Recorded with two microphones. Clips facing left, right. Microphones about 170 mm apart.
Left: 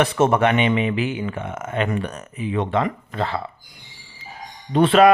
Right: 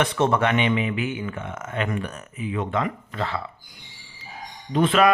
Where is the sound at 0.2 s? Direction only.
20° left (ahead or behind).